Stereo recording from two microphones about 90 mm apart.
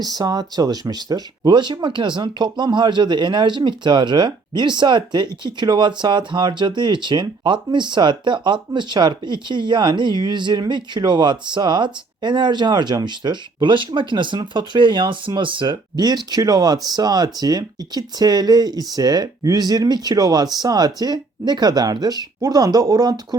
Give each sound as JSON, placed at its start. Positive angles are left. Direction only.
{"t": 0.0, "sound": "speech", "side_deg": -50}